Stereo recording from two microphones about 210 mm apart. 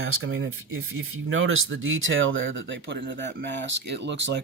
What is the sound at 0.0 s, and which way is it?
Speech, 70° right (ahead or behind).